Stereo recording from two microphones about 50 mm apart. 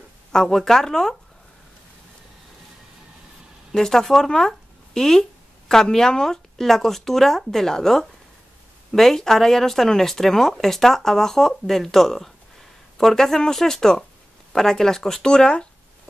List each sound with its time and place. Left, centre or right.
0.3 s speech: centre
3.7 s speech: centre